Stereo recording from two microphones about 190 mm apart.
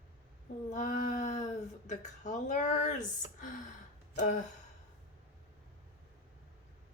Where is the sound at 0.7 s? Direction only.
40° left (ahead or behind).